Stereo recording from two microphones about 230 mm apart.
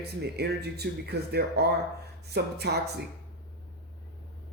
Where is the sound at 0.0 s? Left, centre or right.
Right.